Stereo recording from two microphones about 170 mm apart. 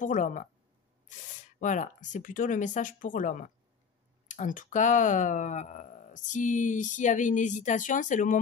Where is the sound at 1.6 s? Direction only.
45° left (ahead or behind).